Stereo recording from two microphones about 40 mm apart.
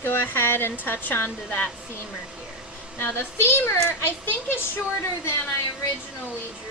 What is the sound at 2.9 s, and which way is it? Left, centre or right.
A child's voice, left.